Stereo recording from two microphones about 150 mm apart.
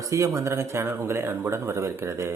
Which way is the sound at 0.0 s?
20° right (ahead or behind).